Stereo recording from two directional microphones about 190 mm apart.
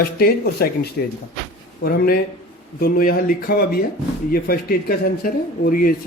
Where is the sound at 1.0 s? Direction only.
65° left (ahead or behind).